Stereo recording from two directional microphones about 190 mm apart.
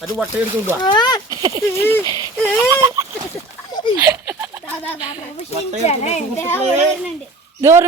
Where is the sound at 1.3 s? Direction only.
20° right (ahead or behind).